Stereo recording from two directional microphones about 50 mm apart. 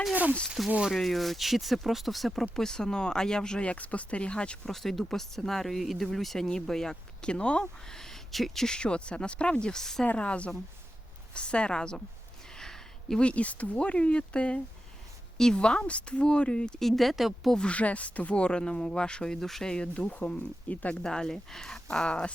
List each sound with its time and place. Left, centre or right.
0.4 s speech: centre; by 4.7 s left
4.7 s speech: centre; by 7.7 s left
7.9 s speech: centre
8.6 s speech: centre
10.1 s speech: left
12.5 s a sound: centre
13.2 s speech: left
16.8 s speech: centre
17.7 s speech: left
20.0 s speech: left
21.0 s speech: centre